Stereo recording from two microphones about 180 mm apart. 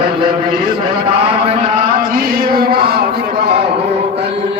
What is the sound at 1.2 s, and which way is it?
Mantra, 35° right (ahead or behind).